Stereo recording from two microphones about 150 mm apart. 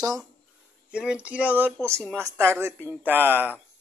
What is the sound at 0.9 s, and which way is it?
Speech, 5° right (ahead or behind).